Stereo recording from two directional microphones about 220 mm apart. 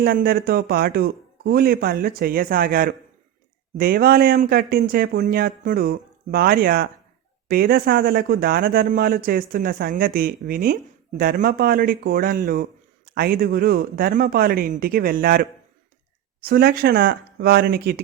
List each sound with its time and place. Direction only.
0.0 s speech: 40° right (ahead or behind)
16.5 s speech: 45° right (ahead or behind)